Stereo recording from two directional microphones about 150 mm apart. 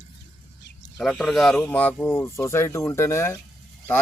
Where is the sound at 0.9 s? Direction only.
Centre (ahead or behind).